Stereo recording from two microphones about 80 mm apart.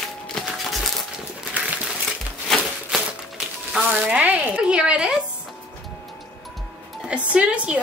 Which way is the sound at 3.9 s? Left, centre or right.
Centre.